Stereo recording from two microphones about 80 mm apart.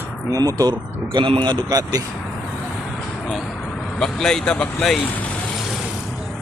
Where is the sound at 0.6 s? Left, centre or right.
Right.